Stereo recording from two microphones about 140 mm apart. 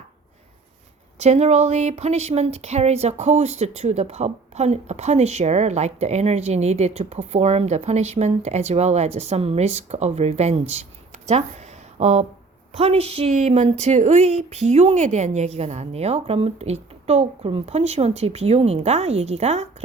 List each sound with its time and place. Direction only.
1.2 s speech: 50° right (ahead or behind)